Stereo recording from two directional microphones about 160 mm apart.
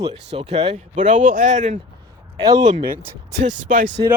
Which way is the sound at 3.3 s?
50° right (ahead or behind).